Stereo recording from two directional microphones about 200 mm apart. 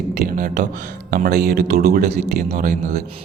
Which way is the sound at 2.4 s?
35° right (ahead or behind).